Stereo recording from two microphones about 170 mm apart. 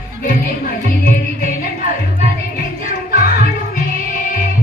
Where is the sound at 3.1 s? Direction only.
60° left (ahead or behind).